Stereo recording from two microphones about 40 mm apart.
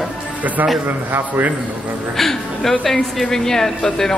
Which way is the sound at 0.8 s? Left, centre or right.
Right.